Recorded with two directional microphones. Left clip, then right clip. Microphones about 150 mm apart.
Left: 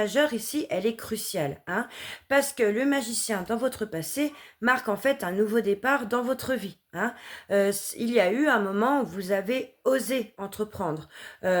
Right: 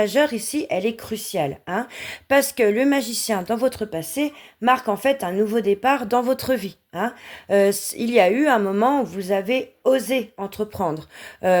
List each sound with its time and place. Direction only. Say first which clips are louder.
0.0 s speech: right 5 dB; 35° right (ahead or behind)